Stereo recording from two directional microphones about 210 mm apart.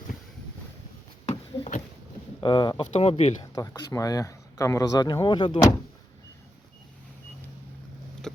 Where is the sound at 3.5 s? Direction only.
15° left (ahead or behind).